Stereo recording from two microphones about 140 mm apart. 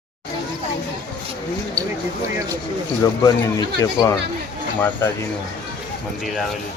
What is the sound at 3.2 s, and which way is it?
Speech, 30° left (ahead or behind).